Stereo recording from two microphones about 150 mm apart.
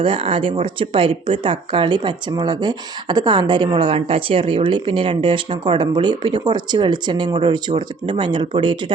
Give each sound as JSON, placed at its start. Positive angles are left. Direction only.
{"t": 0.0, "sound": "speech", "side_deg": -35}